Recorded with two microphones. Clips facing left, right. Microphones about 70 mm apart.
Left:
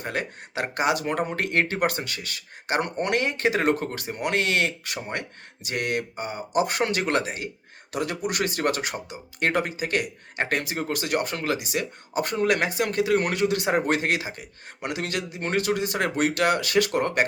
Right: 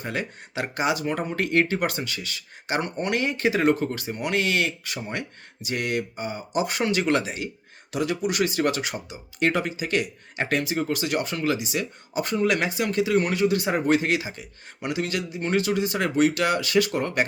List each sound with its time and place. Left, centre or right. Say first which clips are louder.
0.0 s speech: even; left